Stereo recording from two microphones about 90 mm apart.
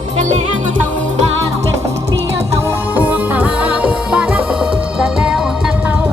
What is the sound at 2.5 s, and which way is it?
Music, 30° right (ahead or behind).